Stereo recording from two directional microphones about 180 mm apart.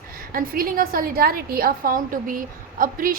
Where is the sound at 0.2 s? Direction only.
50° right (ahead or behind).